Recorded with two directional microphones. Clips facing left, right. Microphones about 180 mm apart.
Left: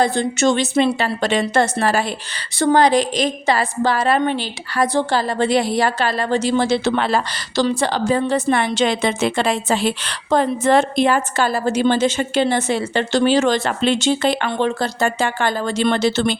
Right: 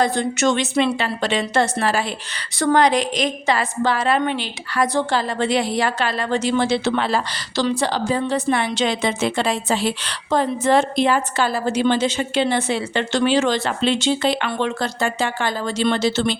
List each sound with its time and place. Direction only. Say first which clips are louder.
0.0 s a woman's voice: left 2 dB; 30° left (ahead or behind)
2.6 s a woman's voice: left 2 dB; 30° left (ahead or behind)
15.2 s a woman's voice: left 3 dB; 55° left (ahead or behind)